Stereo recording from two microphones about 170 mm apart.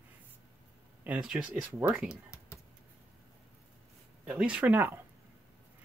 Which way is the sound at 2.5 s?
15° left (ahead or behind).